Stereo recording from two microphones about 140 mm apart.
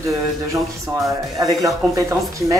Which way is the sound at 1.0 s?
25° right (ahead or behind).